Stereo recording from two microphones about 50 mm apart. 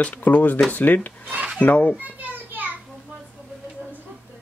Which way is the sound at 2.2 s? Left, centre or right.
Right.